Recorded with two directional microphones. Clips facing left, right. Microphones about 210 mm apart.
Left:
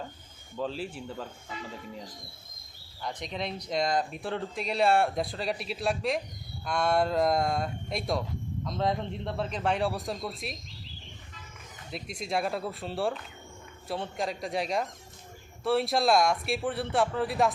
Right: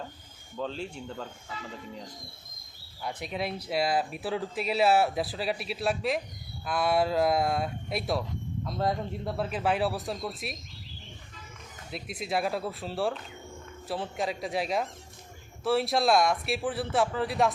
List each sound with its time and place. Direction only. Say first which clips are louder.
0.5 s speech: left 1 dB; 5° left (ahead or behind)
3.0 s speech: right 2 dB; 5° right (ahead or behind)
11.9 s speech: right 1 dB; centre (ahead or behind)